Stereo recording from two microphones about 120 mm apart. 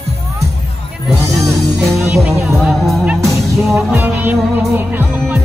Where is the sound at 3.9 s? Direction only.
15° right (ahead or behind).